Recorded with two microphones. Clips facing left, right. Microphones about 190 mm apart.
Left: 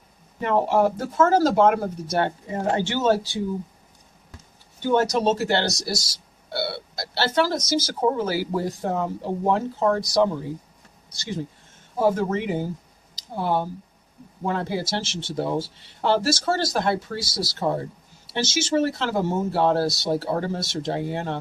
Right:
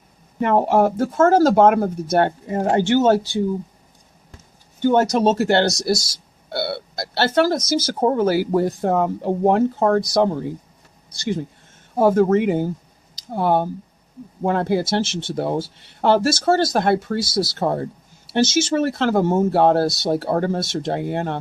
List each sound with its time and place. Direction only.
0.4 s speech: 50° right (ahead or behind)
4.8 s speech: 50° right (ahead or behind)
11.9 s speech: 55° right (ahead or behind)